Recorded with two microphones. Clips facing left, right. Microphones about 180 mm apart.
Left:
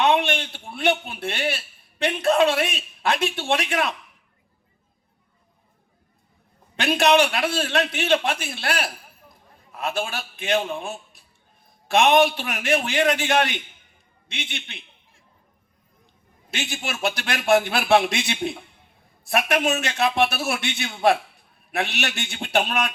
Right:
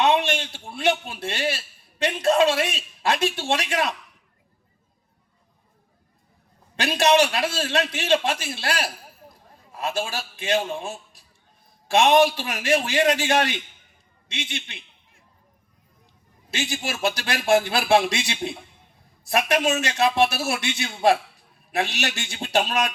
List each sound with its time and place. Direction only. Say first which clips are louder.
0.0 s a man's voice: even; 55° left (ahead or behind)
6.8 s a man's voice: left 1 dB; 55° left (ahead or behind)
16.5 s a man's voice: right 2 dB; 55° left (ahead or behind)